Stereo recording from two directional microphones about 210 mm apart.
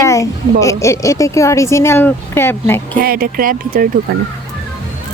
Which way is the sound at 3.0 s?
45° right (ahead or behind).